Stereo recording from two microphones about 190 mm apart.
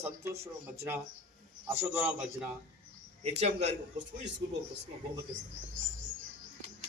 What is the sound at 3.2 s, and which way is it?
Speech, 35° right (ahead or behind).